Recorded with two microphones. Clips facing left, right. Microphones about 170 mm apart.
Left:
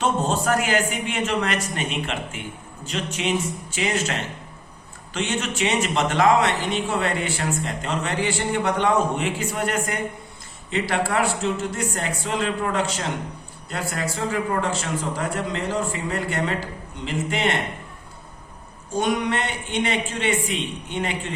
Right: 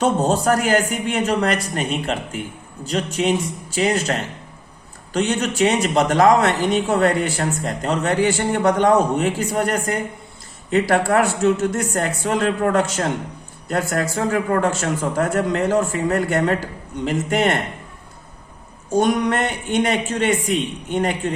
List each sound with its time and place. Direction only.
0.0 s a man's voice: 40° right (ahead or behind)
18.9 s a man's voice: 40° right (ahead or behind)